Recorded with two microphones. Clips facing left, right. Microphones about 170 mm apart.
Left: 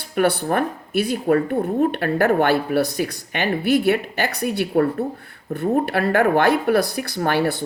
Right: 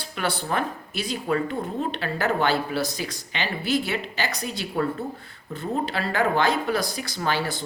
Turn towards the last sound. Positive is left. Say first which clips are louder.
# left 6 dB
turn(degrees=60)  # may be behind; listen again after turning